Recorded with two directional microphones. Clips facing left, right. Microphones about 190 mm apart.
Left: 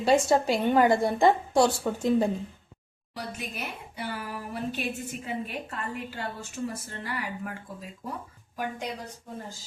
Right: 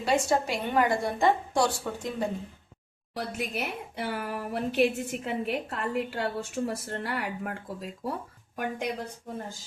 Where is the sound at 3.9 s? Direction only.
55° right (ahead or behind).